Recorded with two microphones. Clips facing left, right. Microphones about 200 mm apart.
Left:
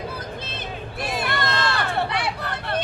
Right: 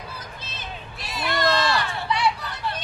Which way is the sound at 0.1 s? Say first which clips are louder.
Left 7 dB; 55° left (ahead or behind).